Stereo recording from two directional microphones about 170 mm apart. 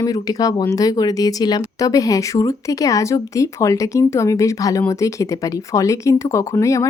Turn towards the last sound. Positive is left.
turn(degrees=20)  # may be behind; listen again after turning